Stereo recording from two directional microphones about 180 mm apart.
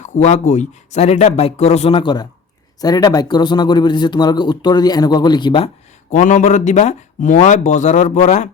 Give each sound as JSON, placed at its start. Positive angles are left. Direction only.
{"t": 0.0, "sound": "speech", "side_deg": 40}
{"t": 6.1, "sound": "speech", "side_deg": 45}